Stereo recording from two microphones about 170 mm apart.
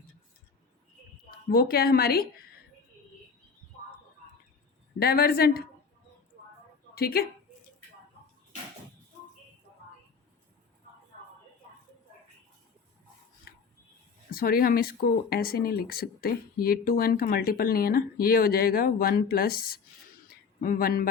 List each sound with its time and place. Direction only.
1.5 s speech: 65° left (ahead or behind)
4.9 s speech: 65° left (ahead or behind)
6.9 s speech: 65° left (ahead or behind)
14.3 s speech: 60° left (ahead or behind)
20.2 s a sound: 55° left (ahead or behind)